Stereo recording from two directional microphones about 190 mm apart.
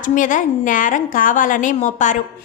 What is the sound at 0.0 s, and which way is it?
A woman's voice, 45° left (ahead or behind).